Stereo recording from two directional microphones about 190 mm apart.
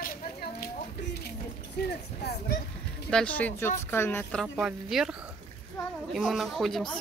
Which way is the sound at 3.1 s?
5° left (ahead or behind).